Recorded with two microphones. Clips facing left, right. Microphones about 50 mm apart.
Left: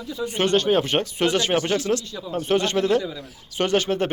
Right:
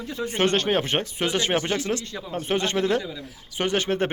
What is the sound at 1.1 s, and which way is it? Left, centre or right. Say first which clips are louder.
A man's voice: left 3 dB; right.